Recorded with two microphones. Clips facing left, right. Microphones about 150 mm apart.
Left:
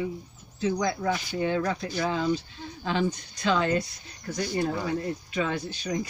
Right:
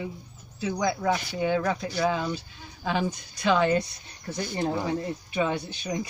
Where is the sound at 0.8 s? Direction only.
15° right (ahead or behind).